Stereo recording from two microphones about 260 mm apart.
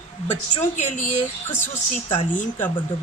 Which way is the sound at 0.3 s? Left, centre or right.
Left.